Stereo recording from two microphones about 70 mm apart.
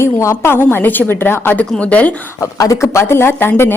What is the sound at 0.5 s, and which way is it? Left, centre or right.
Speech, left.